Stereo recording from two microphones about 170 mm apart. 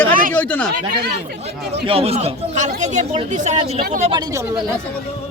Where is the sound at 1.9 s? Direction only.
35° right (ahead or behind).